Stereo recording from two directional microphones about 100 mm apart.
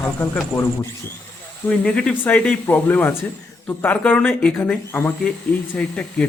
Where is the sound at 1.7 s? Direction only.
10° left (ahead or behind).